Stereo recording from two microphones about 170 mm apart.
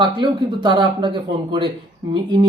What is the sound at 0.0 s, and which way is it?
Speech, 25° right (ahead or behind).